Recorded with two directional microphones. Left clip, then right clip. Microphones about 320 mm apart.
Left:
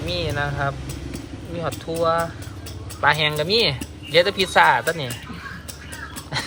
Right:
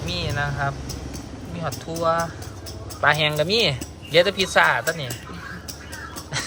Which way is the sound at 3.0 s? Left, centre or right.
Centre.